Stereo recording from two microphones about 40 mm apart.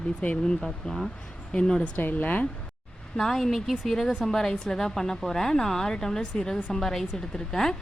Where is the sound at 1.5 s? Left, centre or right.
Left.